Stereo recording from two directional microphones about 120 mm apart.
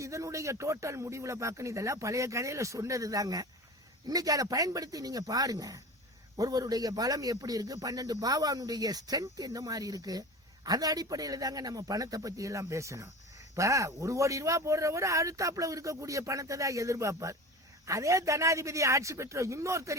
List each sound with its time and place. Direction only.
0.0 s a man's voice: 25° right (ahead or behind)